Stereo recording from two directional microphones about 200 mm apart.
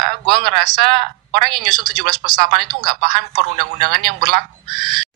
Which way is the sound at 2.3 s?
40° right (ahead or behind).